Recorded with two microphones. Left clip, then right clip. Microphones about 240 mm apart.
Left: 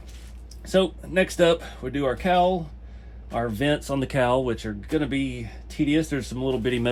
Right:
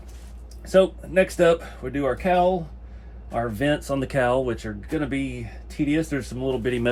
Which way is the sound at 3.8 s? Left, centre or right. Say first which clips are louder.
Right 1 dB; left.